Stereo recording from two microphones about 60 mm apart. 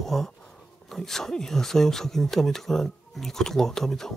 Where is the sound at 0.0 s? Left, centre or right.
Centre.